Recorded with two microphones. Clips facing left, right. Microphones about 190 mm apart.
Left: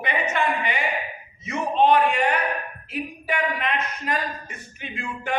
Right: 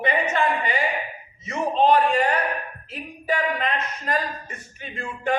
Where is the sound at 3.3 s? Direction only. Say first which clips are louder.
Right 2 dB; 35° right (ahead or behind).